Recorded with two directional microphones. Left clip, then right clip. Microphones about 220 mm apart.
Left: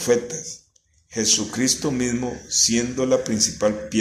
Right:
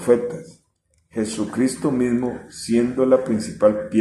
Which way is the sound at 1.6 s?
40° left (ahead or behind).